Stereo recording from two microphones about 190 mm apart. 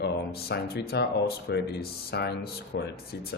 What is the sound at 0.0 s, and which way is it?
Speech, 60° left (ahead or behind).